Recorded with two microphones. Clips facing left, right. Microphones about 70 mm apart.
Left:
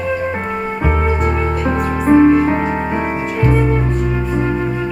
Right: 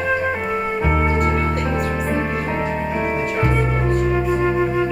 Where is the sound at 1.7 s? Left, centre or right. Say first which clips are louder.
Left 8 dB; left.